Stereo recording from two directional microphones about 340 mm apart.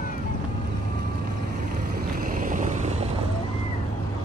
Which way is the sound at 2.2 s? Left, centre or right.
Right.